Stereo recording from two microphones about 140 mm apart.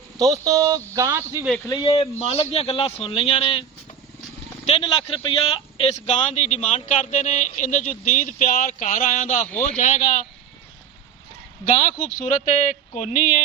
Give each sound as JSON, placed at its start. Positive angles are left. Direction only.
{"t": 0.2, "sound": "speech", "side_deg": -25}
{"t": 1.6, "sound": "speech", "side_deg": 30}
{"t": 4.6, "sound": "speech", "side_deg": 40}
{"t": 11.6, "sound": "speech", "side_deg": 60}